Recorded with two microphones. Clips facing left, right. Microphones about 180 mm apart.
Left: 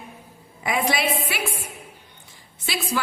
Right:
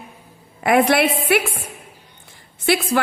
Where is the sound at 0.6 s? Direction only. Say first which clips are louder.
Right 8 dB; 60° right (ahead or behind).